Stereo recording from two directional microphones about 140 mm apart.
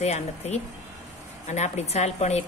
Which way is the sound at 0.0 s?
50° left (ahead or behind).